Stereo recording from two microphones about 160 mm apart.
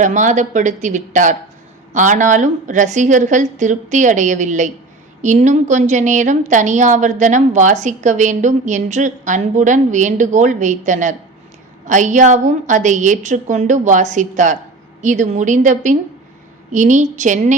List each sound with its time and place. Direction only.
0.0 s a woman's voice: 50° right (ahead or behind)